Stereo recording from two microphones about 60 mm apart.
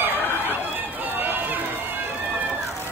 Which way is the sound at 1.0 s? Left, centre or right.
Right.